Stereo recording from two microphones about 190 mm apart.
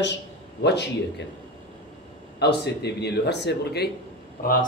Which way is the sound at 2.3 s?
60° left (ahead or behind).